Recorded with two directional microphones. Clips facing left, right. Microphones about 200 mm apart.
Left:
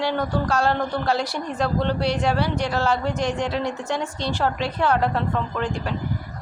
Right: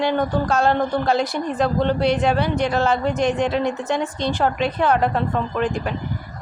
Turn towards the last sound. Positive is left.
turn(degrees=-15)  # may be behind; listen again after turning